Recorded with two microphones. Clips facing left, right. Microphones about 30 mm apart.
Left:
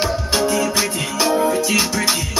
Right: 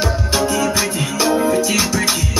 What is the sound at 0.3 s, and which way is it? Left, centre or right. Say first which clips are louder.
Music: right 1 dB; centre.